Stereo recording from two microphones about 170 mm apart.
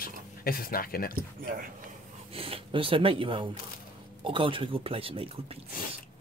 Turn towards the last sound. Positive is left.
turn(degrees=-35)  # may be behind; listen again after turning